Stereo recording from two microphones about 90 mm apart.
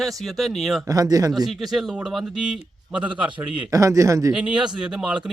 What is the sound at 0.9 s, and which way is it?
Speech, 40° right (ahead or behind).